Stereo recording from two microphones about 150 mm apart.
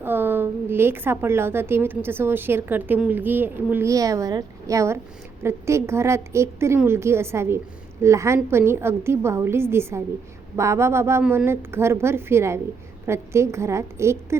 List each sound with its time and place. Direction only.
0.0 s a woman's voice: 15° right (ahead or behind)